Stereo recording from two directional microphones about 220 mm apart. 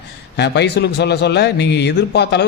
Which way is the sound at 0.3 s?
50° left (ahead or behind).